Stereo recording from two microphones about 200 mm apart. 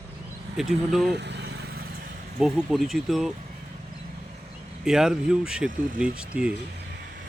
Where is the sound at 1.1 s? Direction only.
60° right (ahead or behind).